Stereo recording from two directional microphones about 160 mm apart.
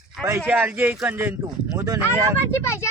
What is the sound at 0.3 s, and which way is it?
Speech, 15° right (ahead or behind).